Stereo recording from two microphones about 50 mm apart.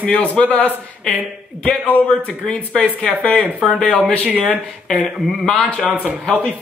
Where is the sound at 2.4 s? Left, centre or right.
Centre.